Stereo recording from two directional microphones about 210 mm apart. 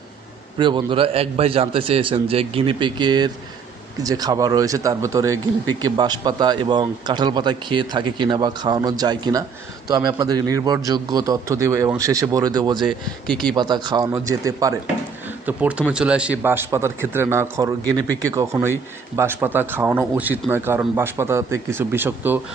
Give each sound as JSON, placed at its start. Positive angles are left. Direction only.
{"t": 0.6, "sound": "a man's voice", "side_deg": -20}
{"t": 12.8, "sound": "speech", "side_deg": 0}
{"t": 13.6, "sound": "a man's voice", "side_deg": -20}